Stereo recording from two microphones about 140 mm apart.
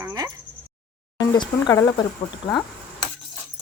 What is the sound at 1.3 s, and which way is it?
Speech, 25° left (ahead or behind).